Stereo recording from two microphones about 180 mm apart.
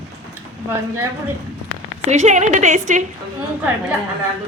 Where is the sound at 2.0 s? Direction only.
40° right (ahead or behind).